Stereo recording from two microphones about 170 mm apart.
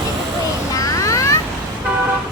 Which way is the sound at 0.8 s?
20° left (ahead or behind).